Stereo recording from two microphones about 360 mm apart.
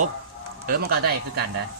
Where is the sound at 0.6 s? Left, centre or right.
Right.